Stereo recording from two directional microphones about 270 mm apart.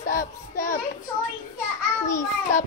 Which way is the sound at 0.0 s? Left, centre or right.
Left.